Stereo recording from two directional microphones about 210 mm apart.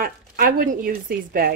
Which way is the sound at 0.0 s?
40° right (ahead or behind).